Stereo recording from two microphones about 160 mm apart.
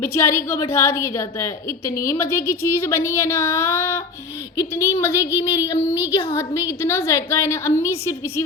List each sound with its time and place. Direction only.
0.0 s speech: 15° left (ahead or behind)
5.4 s child singing: 20° left (ahead or behind)
6.3 s speech: 15° left (ahead or behind)